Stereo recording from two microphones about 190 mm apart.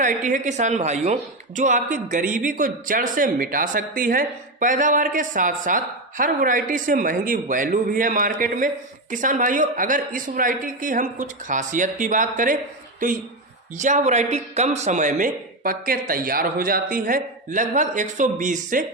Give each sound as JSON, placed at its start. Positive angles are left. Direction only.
{"t": 0.0, "sound": "a man's voice", "side_deg": -40}
{"t": 13.7, "sound": "a man's voice", "side_deg": -40}